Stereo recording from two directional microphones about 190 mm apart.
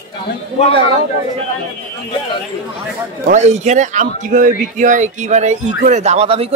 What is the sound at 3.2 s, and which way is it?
Speech, 35° right (ahead or behind).